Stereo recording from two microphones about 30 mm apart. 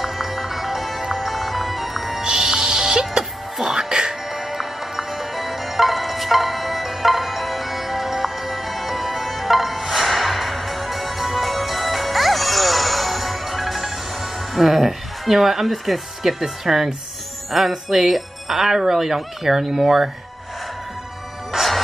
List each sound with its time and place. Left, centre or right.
0.0 s music: centre
2.2 s music: centre
15.6 s speech: centre
21.5 s music: centre